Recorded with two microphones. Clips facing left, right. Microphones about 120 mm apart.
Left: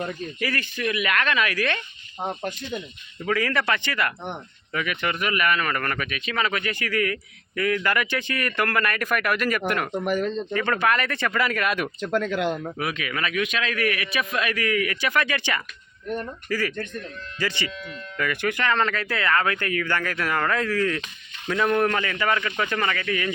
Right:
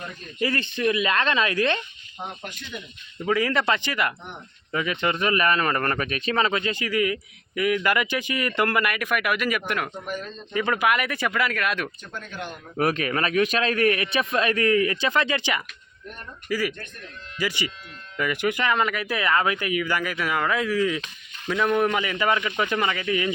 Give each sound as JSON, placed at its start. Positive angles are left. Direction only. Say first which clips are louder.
{"t": 0.3, "sound": "speech", "louder": "right 7 dB", "side_deg": -25}
{"t": 2.2, "sound": "speech", "louder": "left 7 dB", "side_deg": 45}
{"t": 3.2, "sound": "speech", "louder": "right 1 dB", "side_deg": -15}
{"t": 10.0, "sound": "speech", "louder": "left 9 dB", "side_deg": 70}
{"t": 10.5, "sound": "speech", "louder": "right 3 dB", "side_deg": -10}
{"t": 11.9, "sound": "speech", "louder": "left 12 dB", "side_deg": 90}
{"t": 12.7, "sound": "a man's voice", "louder": "right 5 dB", "side_deg": -40}
{"t": 22.0, "sound": "speech", "louder": "right 1 dB", "side_deg": -15}